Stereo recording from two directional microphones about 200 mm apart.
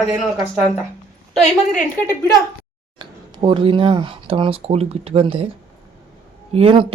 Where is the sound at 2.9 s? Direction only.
25° right (ahead or behind).